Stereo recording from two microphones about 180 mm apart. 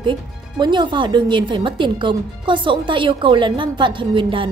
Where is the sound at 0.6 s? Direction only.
25° right (ahead or behind).